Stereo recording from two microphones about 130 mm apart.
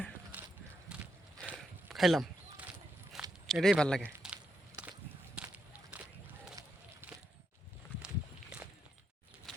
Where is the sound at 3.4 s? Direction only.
Centre (ahead or behind).